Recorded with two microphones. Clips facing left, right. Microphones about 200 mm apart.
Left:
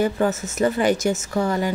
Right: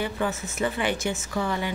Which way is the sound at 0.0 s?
45° left (ahead or behind).